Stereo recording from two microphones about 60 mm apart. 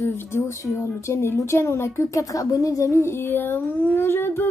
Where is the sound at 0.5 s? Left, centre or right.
Left.